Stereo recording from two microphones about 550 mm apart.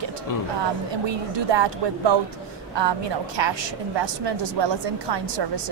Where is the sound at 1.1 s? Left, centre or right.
Right.